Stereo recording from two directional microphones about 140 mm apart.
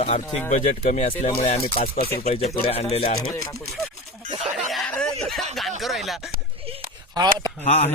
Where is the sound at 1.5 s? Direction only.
40° left (ahead or behind).